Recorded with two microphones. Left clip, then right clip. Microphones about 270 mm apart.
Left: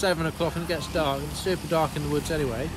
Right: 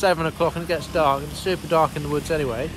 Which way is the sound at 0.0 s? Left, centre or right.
Centre.